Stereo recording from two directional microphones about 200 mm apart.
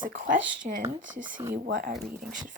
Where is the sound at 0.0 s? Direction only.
40° right (ahead or behind).